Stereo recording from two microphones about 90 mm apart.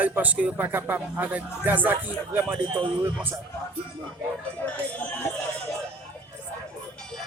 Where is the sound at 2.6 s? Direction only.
75° right (ahead or behind).